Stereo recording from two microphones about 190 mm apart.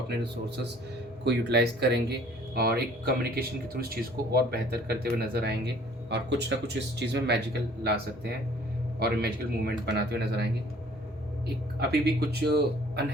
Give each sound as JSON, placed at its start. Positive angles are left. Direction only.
{"t": 0.2, "sound": "speech", "side_deg": -60}
{"t": 9.0, "sound": "speech", "side_deg": -55}
{"t": 11.4, "sound": "speech", "side_deg": -60}